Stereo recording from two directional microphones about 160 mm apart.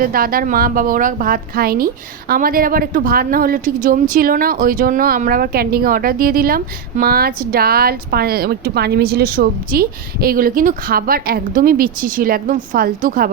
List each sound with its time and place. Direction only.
0.0 s speech: 65° right (ahead or behind)